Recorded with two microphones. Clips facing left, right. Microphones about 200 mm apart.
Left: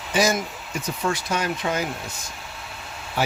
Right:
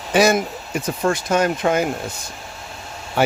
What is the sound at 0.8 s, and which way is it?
Speech, 50° right (ahead or behind).